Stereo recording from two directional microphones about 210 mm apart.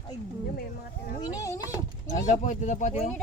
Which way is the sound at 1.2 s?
15° left (ahead or behind).